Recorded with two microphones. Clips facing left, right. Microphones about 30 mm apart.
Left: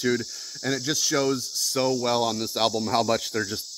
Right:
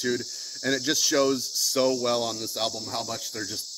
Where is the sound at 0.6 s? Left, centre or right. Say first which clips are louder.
Right 1 dB; centre.